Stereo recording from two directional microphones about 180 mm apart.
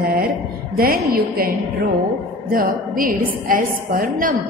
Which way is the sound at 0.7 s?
55° right (ahead or behind).